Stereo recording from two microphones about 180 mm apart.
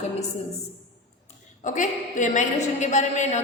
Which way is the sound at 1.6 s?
45° left (ahead or behind).